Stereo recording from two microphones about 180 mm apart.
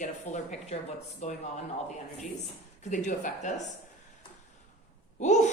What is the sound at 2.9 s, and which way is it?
Speech, 45° left (ahead or behind).